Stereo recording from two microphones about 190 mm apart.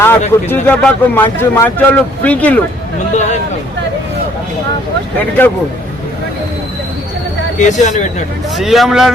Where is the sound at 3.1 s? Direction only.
40° left (ahead or behind).